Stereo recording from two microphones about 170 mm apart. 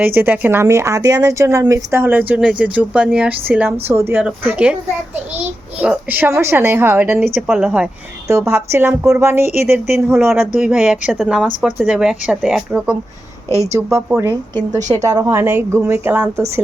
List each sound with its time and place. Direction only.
0.0 s speech: 10° right (ahead or behind)
5.8 s a woman's voice: 10° right (ahead or behind)
14.8 s a woman's voice: 45° right (ahead or behind)
15.0 s speech: 20° right (ahead or behind)